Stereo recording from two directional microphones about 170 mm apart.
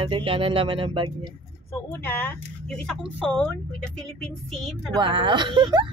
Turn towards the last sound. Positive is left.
turn(degrees=-25)  # may be behind; listen again after turning